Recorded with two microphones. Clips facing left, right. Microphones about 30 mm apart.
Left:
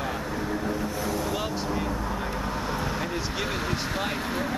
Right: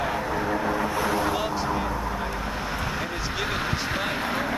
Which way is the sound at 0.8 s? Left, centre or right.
Right.